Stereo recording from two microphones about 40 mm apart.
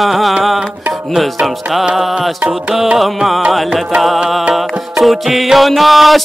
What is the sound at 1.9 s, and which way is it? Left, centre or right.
Music, centre.